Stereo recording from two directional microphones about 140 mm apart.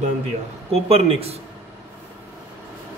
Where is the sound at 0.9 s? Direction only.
45° right (ahead or behind).